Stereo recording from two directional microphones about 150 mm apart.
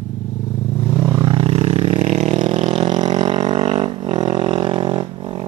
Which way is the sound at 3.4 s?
35° right (ahead or behind).